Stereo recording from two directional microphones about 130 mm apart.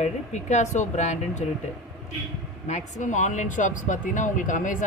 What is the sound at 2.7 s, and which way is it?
Speech, 70° left (ahead or behind).